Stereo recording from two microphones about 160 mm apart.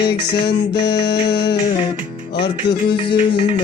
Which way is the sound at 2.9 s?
30° left (ahead or behind).